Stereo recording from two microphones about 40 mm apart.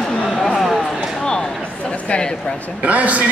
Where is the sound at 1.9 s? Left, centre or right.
Left.